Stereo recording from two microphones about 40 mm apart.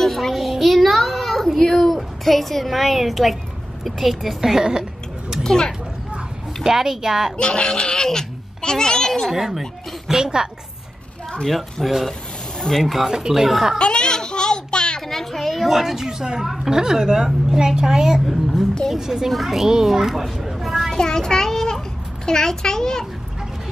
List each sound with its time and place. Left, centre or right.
0.0 s a sound: centre
1.6 s a child's voice: centre
5.4 s a child's voice: centre
6.6 s a woman's voice: centre
7.3 s a child's voice: left
9.3 s speech: centre
10.2 s a woman's voice: centre
11.4 s a woman's voice: centre
12.5 s speech: centre
12.8 s a woman's voice: centre
13.1 s a woman's voice: centre
13.7 s a sound: left
15.0 s a woman's voice: centre
20.9 s a child's voice: centre